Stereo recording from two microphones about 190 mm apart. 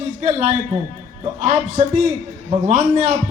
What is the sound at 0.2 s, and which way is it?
A man's voice, 35° right (ahead or behind).